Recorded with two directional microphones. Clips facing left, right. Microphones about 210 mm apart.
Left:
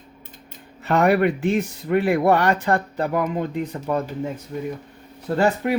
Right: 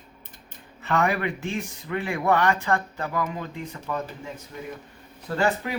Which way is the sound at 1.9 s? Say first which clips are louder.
Left 9 dB; 50° left (ahead or behind).